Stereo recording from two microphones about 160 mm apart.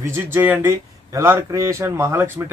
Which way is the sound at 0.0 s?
15° right (ahead or behind).